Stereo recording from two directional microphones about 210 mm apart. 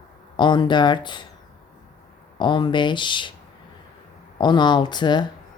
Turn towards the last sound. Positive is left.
turn(degrees=20)  # may be behind; listen again after turning